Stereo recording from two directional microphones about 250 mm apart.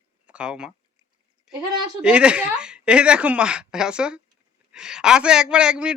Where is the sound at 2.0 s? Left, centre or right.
Centre.